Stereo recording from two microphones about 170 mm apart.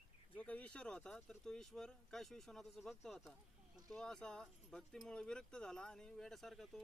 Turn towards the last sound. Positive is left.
turn(degrees=0)  # may be behind; listen again after turning